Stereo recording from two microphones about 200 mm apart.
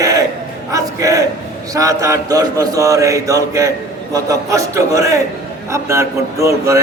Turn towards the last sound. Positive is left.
turn(degrees=-15)  # may be behind; listen again after turning